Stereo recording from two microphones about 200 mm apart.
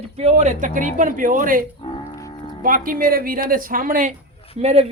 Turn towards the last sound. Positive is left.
turn(degrees=-30)  # may be behind; listen again after turning